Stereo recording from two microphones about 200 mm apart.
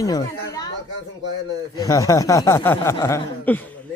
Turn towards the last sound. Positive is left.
turn(degrees=10)  # may be behind; listen again after turning